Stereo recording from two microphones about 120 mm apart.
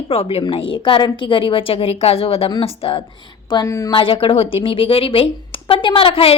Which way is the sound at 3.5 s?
25° left (ahead or behind).